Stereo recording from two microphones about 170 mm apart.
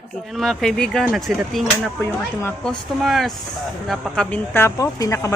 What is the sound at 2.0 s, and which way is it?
Speech, 15° left (ahead or behind).